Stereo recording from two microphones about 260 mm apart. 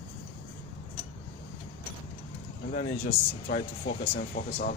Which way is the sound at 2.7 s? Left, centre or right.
Left.